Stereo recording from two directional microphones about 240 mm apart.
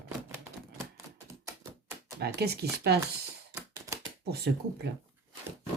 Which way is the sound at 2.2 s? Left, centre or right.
Right.